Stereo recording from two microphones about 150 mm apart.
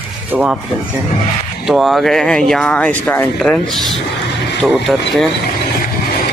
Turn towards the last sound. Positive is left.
turn(degrees=0)  # may be behind; listen again after turning